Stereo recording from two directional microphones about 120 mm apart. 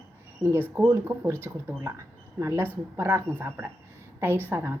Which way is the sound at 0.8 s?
20° right (ahead or behind).